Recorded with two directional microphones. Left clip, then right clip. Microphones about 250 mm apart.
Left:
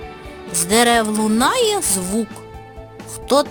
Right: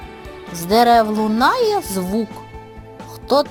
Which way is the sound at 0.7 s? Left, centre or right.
Left.